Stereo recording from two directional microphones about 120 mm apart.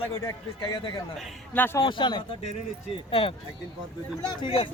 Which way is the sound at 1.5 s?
20° left (ahead or behind).